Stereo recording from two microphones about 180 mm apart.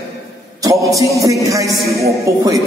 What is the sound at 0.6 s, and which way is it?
Speech, 20° right (ahead or behind).